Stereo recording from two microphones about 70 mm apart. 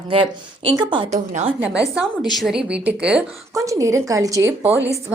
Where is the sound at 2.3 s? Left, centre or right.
Centre.